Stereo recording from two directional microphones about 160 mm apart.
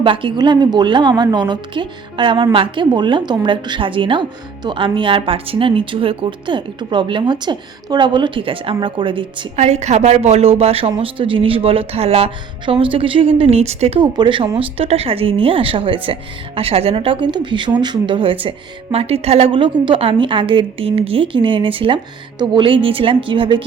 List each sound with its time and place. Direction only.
0.0 s a woman's voice: 30° right (ahead or behind)
9.6 s a woman's voice: 45° right (ahead or behind)
14.0 s a woman's voice: 30° right (ahead or behind)